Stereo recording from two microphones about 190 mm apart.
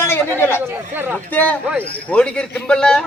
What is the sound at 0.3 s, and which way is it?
A woman's voice, 10° left (ahead or behind).